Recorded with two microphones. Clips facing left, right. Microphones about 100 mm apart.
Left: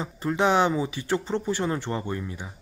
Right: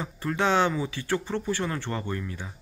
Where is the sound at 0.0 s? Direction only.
20° left (ahead or behind).